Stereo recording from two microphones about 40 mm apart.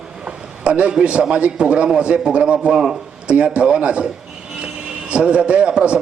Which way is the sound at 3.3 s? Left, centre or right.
Right.